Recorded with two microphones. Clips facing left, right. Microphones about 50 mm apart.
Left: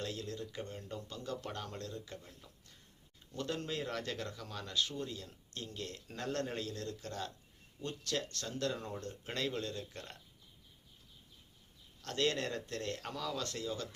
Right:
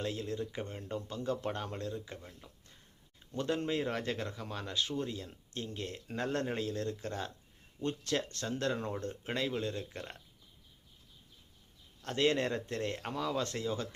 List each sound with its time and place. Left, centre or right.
0.0 s speech: right
9.3 s speech: centre
9.6 s speech: right
12.0 s speech: right